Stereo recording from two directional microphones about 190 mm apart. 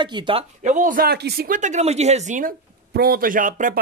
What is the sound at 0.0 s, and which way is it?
Speech, 25° right (ahead or behind).